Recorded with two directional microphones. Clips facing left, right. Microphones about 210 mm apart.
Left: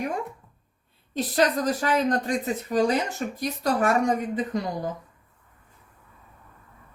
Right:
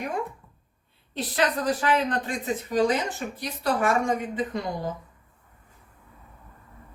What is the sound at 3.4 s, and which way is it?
A woman's voice, 40° left (ahead or behind).